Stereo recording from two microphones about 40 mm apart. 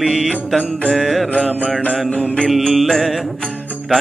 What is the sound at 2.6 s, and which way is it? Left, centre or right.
Mantra, centre.